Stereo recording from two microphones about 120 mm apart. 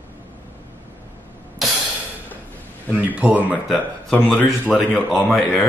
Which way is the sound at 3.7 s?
Centre (ahead or behind).